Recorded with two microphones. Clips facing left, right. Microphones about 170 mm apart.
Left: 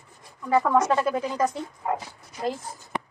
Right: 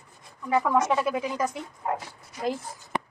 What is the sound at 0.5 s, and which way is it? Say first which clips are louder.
Speech: left 2 dB; centre (ahead or behind).